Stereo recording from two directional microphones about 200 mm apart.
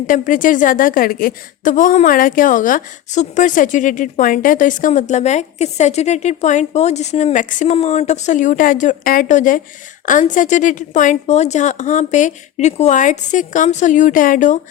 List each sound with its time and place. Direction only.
0.1 s a woman's voice: 40° left (ahead or behind)